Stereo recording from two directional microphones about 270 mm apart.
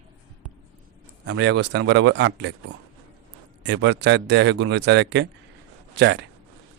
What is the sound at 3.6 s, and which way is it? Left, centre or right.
Speech, right.